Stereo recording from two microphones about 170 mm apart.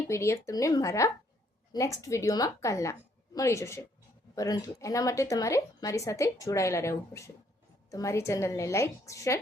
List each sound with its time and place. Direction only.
0.1 s a woman's voice: 15° left (ahead or behind)